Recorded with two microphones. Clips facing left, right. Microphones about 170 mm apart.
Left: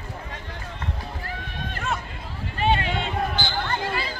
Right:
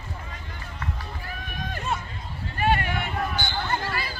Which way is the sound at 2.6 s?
20° left (ahead or behind).